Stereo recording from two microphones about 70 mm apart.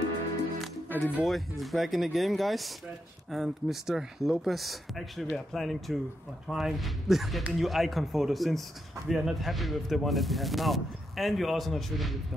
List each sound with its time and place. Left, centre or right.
0.8 s music: left
1.2 s speech: centre